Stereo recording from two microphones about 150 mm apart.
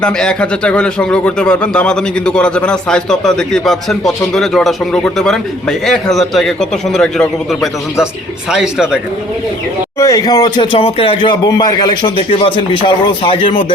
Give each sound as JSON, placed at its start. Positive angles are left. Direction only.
{"t": 0.0, "sound": "speech", "side_deg": 5}
{"t": 10.0, "sound": "speech", "side_deg": 25}